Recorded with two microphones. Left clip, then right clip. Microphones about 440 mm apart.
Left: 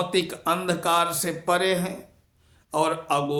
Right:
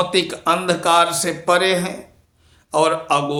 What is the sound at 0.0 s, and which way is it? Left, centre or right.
Speech, left.